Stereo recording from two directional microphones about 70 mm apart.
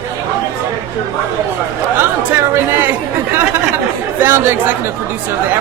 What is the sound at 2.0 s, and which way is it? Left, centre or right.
Chatter, right.